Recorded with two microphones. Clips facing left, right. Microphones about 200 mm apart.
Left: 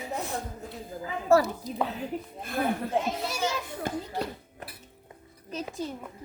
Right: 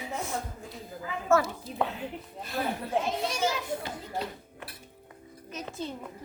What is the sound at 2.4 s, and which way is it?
Speech, 50° left (ahead or behind).